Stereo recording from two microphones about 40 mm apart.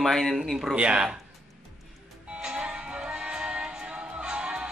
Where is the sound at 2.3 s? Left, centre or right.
Right.